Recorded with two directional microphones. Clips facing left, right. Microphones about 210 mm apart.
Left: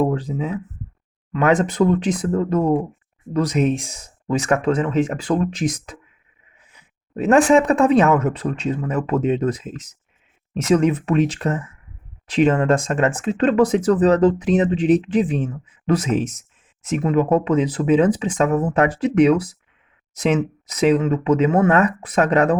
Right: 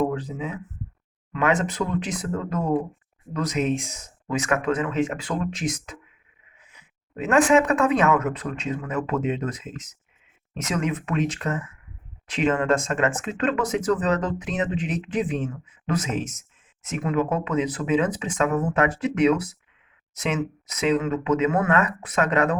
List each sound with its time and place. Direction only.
0.0 s speech: 30° left (ahead or behind)